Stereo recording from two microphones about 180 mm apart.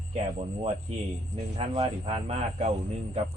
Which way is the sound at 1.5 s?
35° right (ahead or behind).